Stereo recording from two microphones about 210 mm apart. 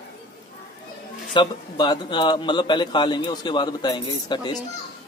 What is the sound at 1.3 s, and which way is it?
A man's voice, 20° left (ahead or behind).